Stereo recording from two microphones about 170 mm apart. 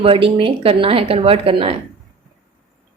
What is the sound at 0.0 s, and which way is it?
Speech, 30° right (ahead or behind).